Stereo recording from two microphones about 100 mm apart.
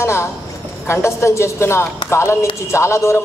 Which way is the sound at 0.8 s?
25° left (ahead or behind).